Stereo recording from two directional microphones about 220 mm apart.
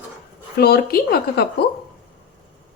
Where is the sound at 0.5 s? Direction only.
45° left (ahead or behind).